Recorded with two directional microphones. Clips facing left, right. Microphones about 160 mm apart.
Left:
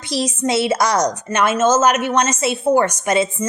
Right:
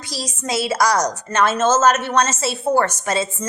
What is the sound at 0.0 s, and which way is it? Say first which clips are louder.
A woman's voice: left 8 dB; 25° left (ahead or behind).